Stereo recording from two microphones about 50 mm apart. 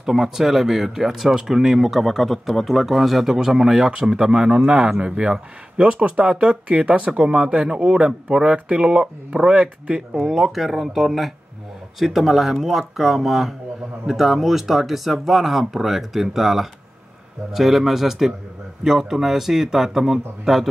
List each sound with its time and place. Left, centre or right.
0.0 s speech: centre; by 10.0 s right
10.1 s speech: centre